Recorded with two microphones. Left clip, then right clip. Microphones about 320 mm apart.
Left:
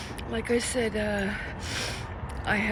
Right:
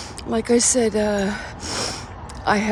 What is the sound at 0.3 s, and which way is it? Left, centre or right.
Speech, centre.